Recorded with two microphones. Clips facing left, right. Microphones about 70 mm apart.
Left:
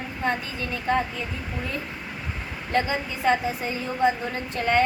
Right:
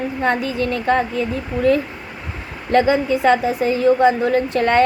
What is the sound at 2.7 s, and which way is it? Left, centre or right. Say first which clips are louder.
A woman's voice: right 10 dB; right.